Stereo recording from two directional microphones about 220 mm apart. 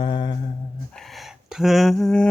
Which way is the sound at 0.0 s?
20° left (ahead or behind).